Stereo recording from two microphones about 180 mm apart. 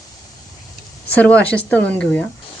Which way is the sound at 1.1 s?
5° left (ahead or behind).